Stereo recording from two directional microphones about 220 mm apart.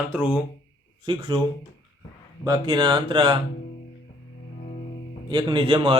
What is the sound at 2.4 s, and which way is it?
Speech, 20° right (ahead or behind).